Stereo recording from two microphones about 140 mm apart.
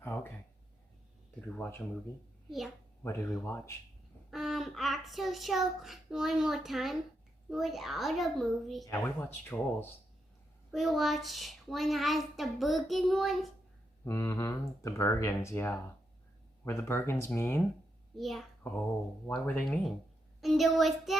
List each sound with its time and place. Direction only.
0.0 s a sound: 15° left (ahead or behind)
1.4 s speech: 10° left (ahead or behind)
3.0 s speech: 15° left (ahead or behind)
4.3 s a child's voice: centre (ahead or behind)
8.8 s speech: 15° left (ahead or behind)
10.7 s a child's voice: centre (ahead or behind)
14.0 s speech: 20° left (ahead or behind)
18.2 s a child's voice: centre (ahead or behind)
19.3 s speech: 10° left (ahead or behind)
20.4 s a child's voice: centre (ahead or behind)